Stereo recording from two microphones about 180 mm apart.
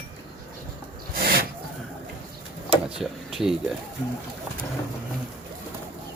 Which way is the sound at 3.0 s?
Centre (ahead or behind).